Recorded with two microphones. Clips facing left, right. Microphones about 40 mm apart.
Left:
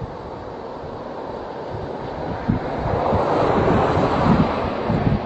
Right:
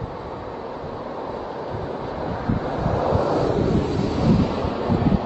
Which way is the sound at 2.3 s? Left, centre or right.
Left.